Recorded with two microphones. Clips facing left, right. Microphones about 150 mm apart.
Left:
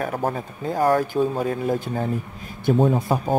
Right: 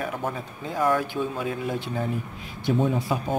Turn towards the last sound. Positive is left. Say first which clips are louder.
# left 5 dB
turn(degrees=50)  # may be behind; listen again after turning